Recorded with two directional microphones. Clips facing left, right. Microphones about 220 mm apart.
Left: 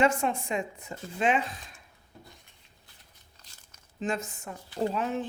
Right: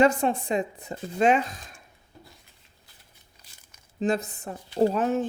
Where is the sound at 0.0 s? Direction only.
35° right (ahead or behind).